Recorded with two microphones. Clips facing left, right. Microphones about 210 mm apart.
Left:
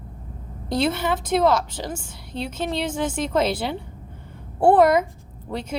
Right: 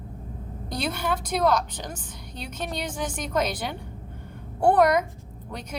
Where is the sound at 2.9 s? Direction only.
25° left (ahead or behind).